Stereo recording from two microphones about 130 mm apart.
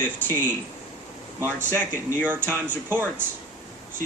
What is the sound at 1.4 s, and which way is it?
Speech, 15° right (ahead or behind).